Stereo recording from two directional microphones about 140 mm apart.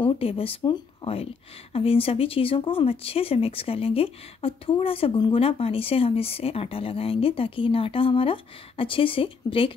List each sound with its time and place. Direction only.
0.0 s speech: 40° left (ahead or behind)